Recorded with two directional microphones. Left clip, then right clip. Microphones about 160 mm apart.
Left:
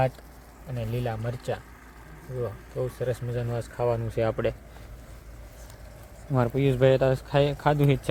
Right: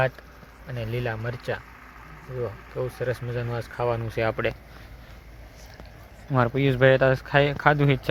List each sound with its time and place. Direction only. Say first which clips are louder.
0.7 s speech: right 2 dB; centre (ahead or behind)
2.7 s speech: right 1 dB; centre (ahead or behind)
4.1 s speech: right 1 dB; 20° left (ahead or behind)
6.3 s speech: right 2 dB; 5° left (ahead or behind)